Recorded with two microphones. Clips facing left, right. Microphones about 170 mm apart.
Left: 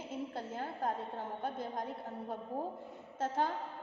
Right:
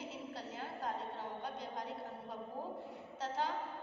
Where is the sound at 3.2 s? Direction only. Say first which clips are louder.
Left 5 dB; 50° left (ahead or behind).